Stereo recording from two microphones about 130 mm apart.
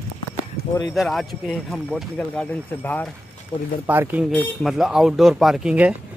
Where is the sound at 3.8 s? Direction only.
15° right (ahead or behind).